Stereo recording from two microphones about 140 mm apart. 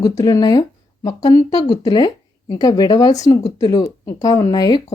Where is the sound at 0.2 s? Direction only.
25° left (ahead or behind).